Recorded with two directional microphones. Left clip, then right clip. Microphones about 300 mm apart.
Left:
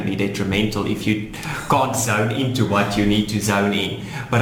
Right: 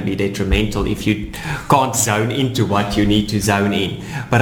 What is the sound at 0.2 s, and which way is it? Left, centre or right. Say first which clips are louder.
Speech: right 2 dB; right.